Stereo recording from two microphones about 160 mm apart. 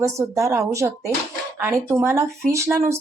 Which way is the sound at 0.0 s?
20° right (ahead or behind).